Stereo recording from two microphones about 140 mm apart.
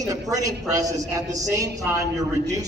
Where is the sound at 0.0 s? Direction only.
25° right (ahead or behind).